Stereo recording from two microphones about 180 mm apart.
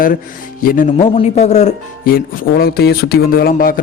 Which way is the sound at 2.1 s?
55° left (ahead or behind).